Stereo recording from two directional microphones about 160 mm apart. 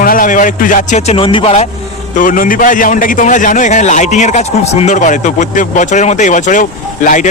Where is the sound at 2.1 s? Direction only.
55° left (ahead or behind).